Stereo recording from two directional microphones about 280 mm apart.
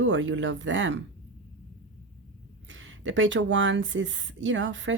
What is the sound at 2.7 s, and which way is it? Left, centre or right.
Speech, right.